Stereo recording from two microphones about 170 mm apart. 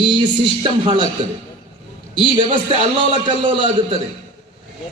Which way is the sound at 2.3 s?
30° right (ahead or behind).